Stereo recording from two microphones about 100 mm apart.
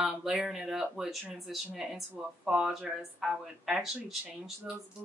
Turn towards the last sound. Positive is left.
turn(degrees=-5)  # may be behind; listen again after turning